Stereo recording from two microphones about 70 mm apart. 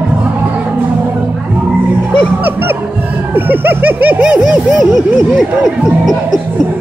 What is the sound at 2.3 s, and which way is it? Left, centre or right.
Music, right.